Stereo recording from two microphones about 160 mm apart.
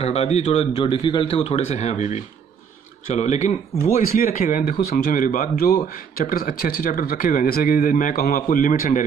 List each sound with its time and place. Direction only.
0.0 s speech: 40° left (ahead or behind)
4.0 s speech: 60° left (ahead or behind)